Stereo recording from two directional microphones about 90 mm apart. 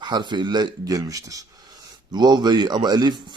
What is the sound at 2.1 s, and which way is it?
A man's voice, 50° right (ahead or behind).